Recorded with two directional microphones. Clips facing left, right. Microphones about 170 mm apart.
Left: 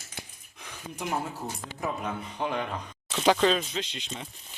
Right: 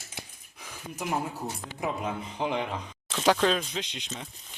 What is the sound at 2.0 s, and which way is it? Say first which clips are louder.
Speech: right 1 dB; 20° right (ahead or behind).